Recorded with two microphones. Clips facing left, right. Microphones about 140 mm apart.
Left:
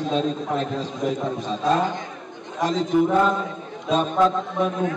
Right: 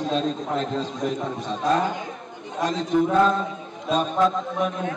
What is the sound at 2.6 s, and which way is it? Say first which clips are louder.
Speech: left 2 dB; centre (ahead or behind).